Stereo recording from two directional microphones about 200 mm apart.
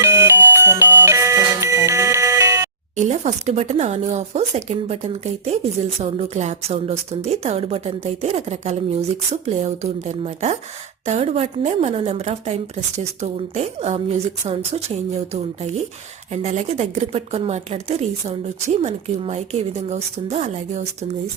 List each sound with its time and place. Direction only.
0.0 s music: 10° right (ahead or behind)
2.9 s a woman's voice: 35° right (ahead or behind)